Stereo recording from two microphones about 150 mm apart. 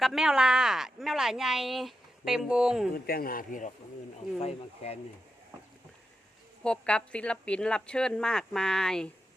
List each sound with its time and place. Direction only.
0.0 s speech: centre (ahead or behind)
2.9 s speech: 85° left; by 3.7 s 65° left (ahead or behind)
4.4 s speech: 45° left (ahead or behind)
6.7 s speech: 5° left (ahead or behind)